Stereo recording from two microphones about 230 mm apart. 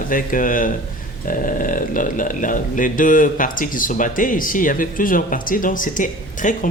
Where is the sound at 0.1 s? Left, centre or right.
Left.